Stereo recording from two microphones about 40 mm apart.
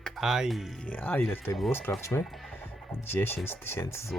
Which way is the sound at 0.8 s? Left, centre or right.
Left.